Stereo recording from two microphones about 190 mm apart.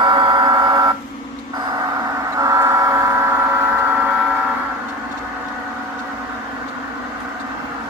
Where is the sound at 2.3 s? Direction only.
15° right (ahead or behind).